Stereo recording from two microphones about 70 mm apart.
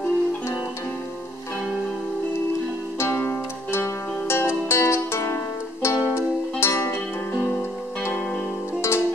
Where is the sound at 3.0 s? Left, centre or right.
Left.